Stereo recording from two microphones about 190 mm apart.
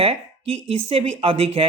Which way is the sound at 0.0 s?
30° right (ahead or behind).